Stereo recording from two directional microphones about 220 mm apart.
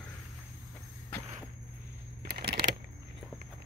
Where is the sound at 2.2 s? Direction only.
45° right (ahead or behind).